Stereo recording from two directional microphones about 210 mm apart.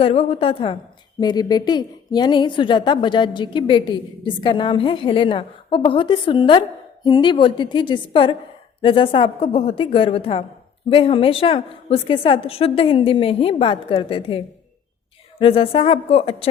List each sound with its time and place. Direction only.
0.0 s a woman's voice: 30° left (ahead or behind)